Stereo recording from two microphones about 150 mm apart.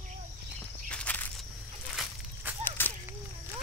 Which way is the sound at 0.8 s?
10° left (ahead or behind).